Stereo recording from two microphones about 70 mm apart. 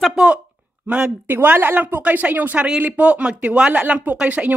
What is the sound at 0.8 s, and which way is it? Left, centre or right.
Speech, centre.